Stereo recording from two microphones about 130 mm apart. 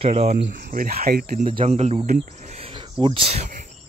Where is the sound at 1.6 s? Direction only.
60° right (ahead or behind).